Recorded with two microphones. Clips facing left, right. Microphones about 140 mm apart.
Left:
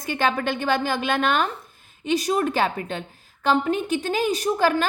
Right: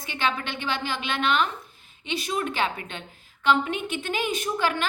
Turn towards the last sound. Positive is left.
turn(degrees=40)  # may be behind; listen again after turning